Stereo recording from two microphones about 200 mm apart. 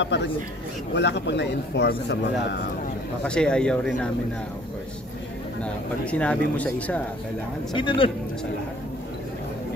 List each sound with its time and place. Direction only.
0.0 s a man's voice: 60° left (ahead or behind)
3.3 s speech: 5° left (ahead or behind)
5.6 s speech: 5° left (ahead or behind)
7.7 s a man's voice: 25° left (ahead or behind)